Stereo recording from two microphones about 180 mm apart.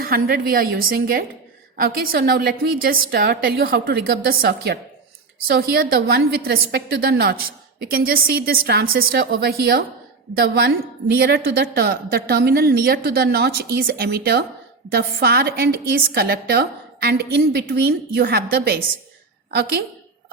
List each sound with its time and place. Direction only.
0.0 s a woman's voice: 55° right (ahead or behind)